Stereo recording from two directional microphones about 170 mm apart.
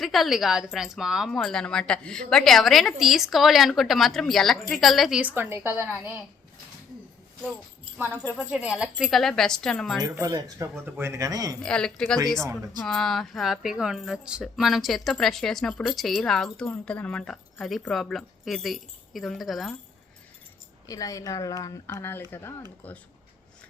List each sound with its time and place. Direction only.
0.0 s speech: centre (ahead or behind)
7.9 s speech: 10° right (ahead or behind)
10.0 s speech: 20° right (ahead or behind)
11.6 s speech: 5° left (ahead or behind)
20.8 s speech: 20° left (ahead or behind)